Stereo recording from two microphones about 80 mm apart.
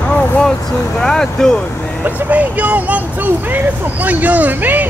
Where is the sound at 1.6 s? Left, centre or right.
Centre.